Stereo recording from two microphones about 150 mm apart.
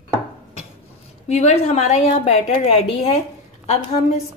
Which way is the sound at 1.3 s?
45° left (ahead or behind).